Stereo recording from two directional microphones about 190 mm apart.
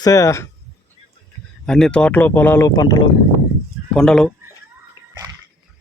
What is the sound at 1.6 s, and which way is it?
Speech, 5° left (ahead or behind).